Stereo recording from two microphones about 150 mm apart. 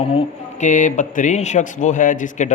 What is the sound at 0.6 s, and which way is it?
Speech, 60° left (ahead or behind).